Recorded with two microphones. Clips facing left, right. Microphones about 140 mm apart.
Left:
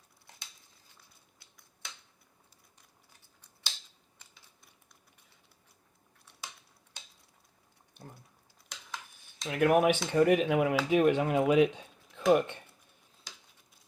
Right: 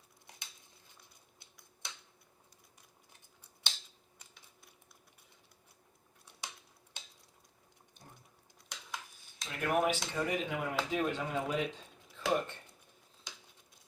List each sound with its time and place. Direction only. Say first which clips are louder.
9.5 s speech: left 7 dB; 65° left (ahead or behind)
12.1 s speech: left 8 dB; 65° left (ahead or behind)